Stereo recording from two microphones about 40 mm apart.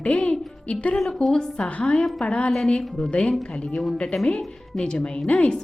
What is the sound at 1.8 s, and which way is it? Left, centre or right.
A woman's voice, left.